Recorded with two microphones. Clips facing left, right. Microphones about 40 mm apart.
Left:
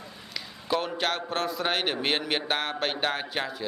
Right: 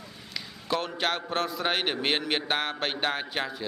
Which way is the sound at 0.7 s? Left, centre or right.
Centre.